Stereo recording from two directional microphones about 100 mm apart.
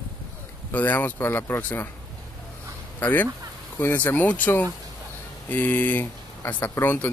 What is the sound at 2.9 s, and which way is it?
Speech, 20° left (ahead or behind).